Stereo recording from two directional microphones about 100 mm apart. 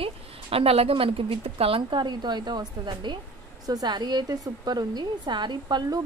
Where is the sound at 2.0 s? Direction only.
45° right (ahead or behind).